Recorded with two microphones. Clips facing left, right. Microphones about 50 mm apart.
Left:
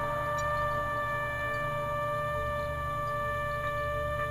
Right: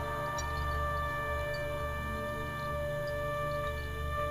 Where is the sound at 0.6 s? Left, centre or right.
Centre.